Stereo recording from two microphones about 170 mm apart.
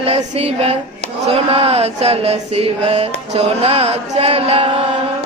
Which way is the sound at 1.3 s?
35° right (ahead or behind).